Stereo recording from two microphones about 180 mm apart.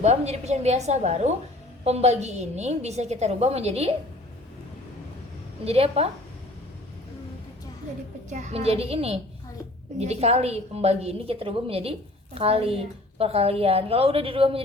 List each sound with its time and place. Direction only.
0.0 s a woman's voice: 35° right (ahead or behind)
5.6 s a woman's voice: 35° right (ahead or behind)
8.3 s a woman's voice: 40° right (ahead or behind)